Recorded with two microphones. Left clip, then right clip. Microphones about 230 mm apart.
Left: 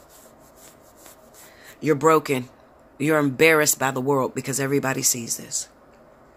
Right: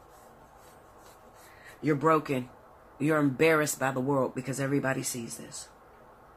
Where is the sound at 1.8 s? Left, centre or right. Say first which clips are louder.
Left 7 dB; left.